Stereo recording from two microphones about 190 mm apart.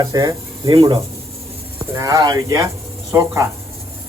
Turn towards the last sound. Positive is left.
turn(degrees=-15)  # may be behind; listen again after turning